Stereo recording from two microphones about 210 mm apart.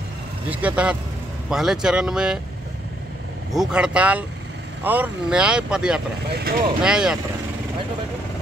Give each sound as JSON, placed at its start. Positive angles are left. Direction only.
{"t": 0.5, "sound": "speech", "side_deg": -5}
{"t": 3.5, "sound": "speech", "side_deg": -5}
{"t": 6.3, "sound": "speech", "side_deg": -45}
{"t": 6.8, "sound": "speech", "side_deg": -5}